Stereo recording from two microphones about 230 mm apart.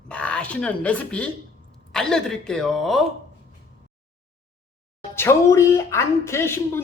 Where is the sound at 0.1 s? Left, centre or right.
Centre.